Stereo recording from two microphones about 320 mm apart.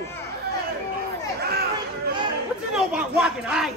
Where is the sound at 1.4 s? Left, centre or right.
Right.